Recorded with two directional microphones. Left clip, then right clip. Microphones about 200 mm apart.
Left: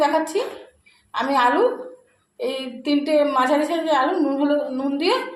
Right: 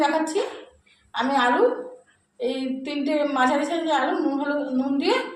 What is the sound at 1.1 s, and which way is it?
Speech, 30° left (ahead or behind).